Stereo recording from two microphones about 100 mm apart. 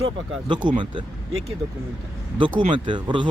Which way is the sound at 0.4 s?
50° right (ahead or behind).